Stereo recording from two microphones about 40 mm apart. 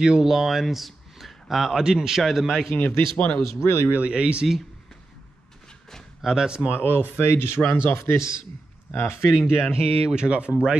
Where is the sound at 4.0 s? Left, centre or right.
Right.